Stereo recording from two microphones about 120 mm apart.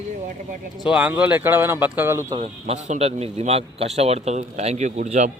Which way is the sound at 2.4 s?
70° right (ahead or behind).